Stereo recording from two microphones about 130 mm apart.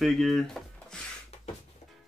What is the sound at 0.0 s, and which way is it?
Speech, centre (ahead or behind).